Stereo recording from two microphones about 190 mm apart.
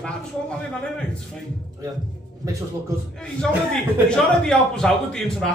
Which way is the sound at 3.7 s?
5° left (ahead or behind).